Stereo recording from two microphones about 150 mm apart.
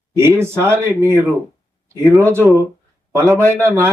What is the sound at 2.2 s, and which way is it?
Speech, 15° right (ahead or behind).